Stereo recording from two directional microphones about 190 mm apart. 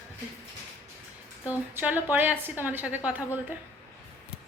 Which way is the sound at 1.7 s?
10° right (ahead or behind).